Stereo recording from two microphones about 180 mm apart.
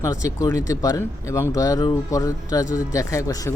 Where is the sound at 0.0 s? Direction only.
20° left (ahead or behind).